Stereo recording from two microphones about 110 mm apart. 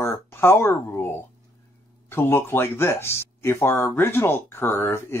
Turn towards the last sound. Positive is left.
turn(degrees=20)  # may be behind; listen again after turning